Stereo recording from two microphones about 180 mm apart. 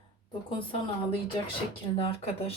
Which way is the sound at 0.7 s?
30° left (ahead or behind).